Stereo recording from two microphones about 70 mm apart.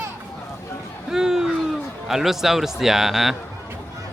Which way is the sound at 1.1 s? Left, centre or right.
Centre.